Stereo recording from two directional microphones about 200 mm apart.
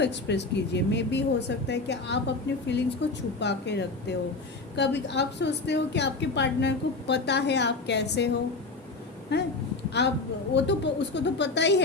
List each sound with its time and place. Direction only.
0.0 s speech: 60° left (ahead or behind)
9.3 s speech: 55° left (ahead or behind)